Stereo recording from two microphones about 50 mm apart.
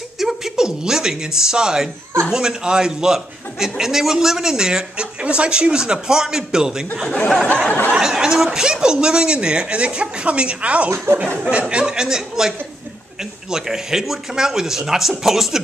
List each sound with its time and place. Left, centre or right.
0.2 s a woman's voice: centre
7.6 s a sound: left
8.0 s a man's voice: centre
11.1 s speech: right
11.7 s a man's voice: centre